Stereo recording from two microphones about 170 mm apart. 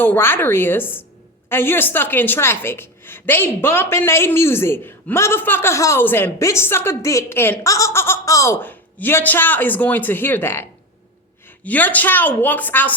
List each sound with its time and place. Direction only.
0.0 s a woman's voice: 10° left (ahead or behind)